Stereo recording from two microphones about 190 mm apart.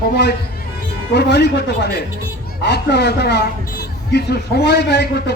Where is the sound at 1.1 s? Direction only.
60° left (ahead or behind).